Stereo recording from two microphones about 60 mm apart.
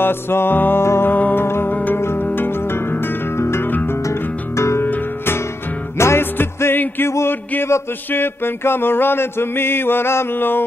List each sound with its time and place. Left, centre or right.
0.0 s music: left
1.1 s music: left
4.0 s music: left
4.8 s music: left
5.9 s music: left